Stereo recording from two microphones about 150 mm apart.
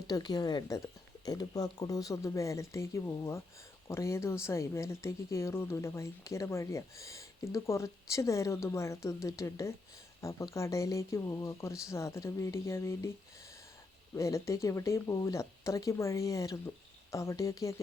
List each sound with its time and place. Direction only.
0.1 s speech: 30° left (ahead or behind)
14.2 s speech: 20° left (ahead or behind)